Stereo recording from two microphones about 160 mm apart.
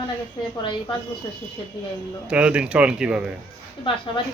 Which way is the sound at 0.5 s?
30° left (ahead or behind).